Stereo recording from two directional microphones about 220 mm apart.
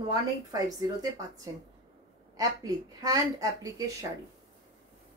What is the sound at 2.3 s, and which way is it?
Speech, 15° right (ahead or behind).